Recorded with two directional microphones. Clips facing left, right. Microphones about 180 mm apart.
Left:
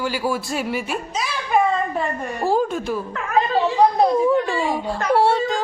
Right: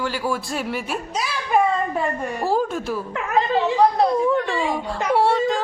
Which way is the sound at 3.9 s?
15° left (ahead or behind).